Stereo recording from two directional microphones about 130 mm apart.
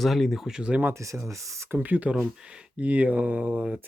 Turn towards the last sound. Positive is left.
turn(degrees=-10)  # may be behind; listen again after turning